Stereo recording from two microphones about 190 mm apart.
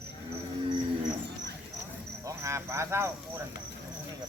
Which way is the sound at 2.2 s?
15° right (ahead or behind).